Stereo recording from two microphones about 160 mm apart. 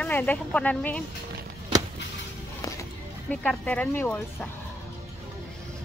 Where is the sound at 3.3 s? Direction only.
5° left (ahead or behind).